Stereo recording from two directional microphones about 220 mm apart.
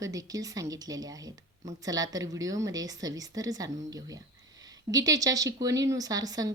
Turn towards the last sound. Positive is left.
turn(degrees=-15)  # may be behind; listen again after turning